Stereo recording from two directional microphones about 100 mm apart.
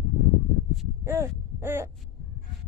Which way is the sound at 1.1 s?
25° right (ahead or behind).